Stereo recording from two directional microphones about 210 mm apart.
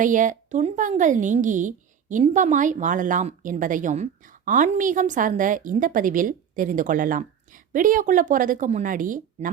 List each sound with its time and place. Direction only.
0.0 s speech: 40° right (ahead or behind)